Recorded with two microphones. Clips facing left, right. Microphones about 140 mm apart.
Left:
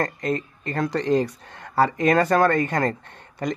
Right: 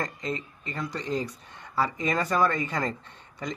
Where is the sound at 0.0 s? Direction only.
60° left (ahead or behind).